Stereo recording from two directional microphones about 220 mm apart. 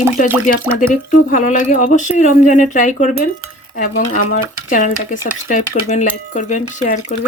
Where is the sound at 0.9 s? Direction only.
35° left (ahead or behind).